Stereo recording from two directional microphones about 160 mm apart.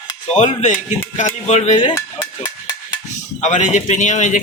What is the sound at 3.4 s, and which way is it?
A man's voice, 50° left (ahead or behind).